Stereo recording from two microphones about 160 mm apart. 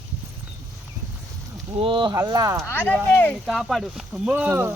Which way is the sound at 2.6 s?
10° left (ahead or behind).